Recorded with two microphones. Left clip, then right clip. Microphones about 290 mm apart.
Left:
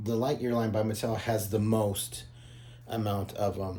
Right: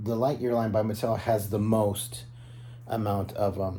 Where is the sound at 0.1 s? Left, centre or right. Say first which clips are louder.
Right 3 dB; centre.